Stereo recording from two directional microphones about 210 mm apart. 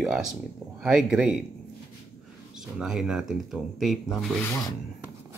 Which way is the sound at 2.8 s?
5° right (ahead or behind).